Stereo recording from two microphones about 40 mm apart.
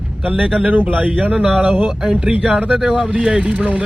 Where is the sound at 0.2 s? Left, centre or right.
Right.